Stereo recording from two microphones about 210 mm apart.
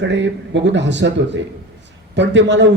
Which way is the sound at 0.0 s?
60° right (ahead or behind).